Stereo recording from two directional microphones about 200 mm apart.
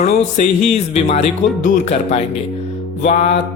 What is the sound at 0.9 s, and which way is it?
Speech, 30° left (ahead or behind).